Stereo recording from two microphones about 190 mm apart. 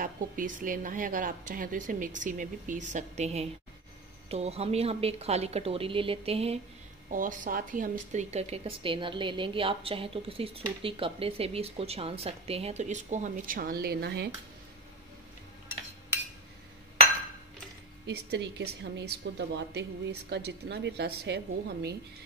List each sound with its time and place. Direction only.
0.0 s a woman's voice: 45° right (ahead or behind)
7.1 s a woman's voice: 45° right (ahead or behind); by 14.3 s 60° right (ahead or behind)
18.0 s a woman's voice: 60° right (ahead or behind)